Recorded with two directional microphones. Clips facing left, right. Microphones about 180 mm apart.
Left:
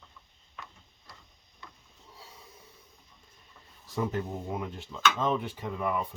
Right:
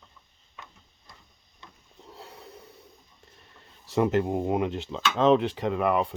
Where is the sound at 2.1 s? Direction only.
65° right (ahead or behind).